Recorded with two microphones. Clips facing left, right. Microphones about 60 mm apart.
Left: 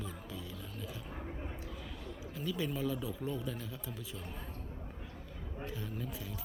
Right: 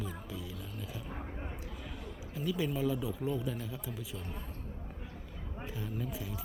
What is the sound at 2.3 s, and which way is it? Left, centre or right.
Speech, centre.